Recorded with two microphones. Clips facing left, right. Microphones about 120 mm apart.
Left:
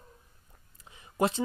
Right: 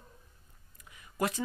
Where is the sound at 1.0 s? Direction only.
25° left (ahead or behind).